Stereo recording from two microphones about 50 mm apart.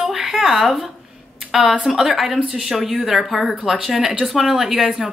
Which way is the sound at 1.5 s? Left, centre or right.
Centre.